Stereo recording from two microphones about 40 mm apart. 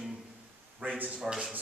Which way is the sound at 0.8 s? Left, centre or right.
Right.